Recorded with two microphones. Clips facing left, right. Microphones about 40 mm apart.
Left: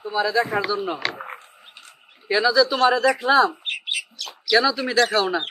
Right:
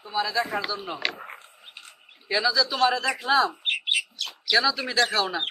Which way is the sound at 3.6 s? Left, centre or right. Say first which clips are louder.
Right 2 dB; right.